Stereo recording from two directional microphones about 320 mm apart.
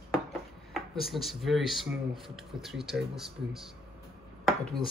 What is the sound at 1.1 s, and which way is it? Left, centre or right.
Speech, centre.